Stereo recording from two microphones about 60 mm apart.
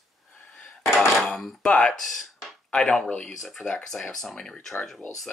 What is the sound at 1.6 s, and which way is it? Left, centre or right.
Speech, centre.